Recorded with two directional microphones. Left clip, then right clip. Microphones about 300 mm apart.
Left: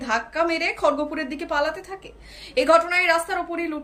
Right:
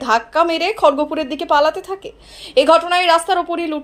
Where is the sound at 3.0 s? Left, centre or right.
Right.